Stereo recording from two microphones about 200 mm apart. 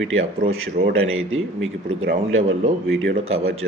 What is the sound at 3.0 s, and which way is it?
Speech, 85° right.